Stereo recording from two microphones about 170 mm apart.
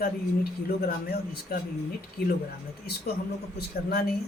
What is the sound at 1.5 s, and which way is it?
Speech, 60° left (ahead or behind).